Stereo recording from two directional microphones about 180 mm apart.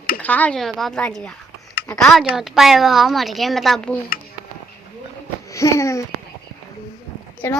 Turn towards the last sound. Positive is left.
turn(degrees=10)  # may be behind; listen again after turning